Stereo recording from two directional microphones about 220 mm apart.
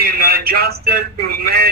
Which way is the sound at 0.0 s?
45° right (ahead or behind).